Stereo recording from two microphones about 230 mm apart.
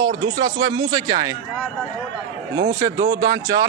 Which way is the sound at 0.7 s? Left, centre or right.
Centre.